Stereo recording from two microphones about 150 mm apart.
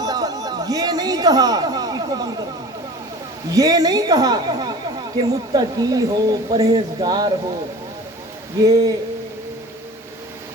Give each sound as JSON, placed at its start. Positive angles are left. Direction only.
{"t": 0.0, "sound": "chatter", "side_deg": -25}
{"t": 3.5, "sound": "a woman's voice", "side_deg": -25}
{"t": 8.5, "sound": "a woman's voice", "side_deg": -25}